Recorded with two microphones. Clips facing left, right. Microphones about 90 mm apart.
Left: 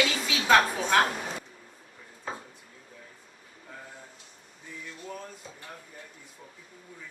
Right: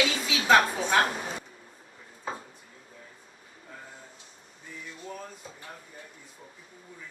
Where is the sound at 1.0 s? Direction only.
15° right (ahead or behind).